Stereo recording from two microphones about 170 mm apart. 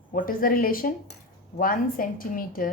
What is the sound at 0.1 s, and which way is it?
A woman's voice, 55° left (ahead or behind).